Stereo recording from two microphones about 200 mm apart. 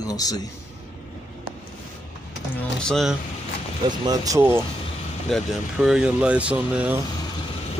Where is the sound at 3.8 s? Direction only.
20° right (ahead or behind).